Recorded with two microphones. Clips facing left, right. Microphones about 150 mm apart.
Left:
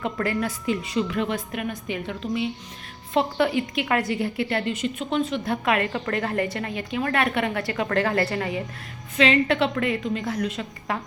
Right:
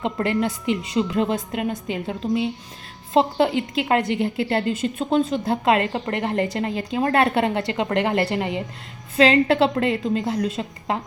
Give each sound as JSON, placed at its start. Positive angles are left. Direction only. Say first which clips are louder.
{"t": 0.0, "sound": "a woman's voice", "louder": "right 3 dB", "side_deg": -25}
{"t": 9.1, "sound": "a woman's voice", "louder": "right 4 dB", "side_deg": -35}